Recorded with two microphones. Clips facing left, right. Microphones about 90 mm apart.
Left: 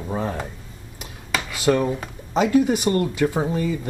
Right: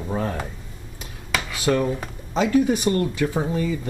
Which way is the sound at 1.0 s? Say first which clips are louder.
Even; 5° left (ahead or behind).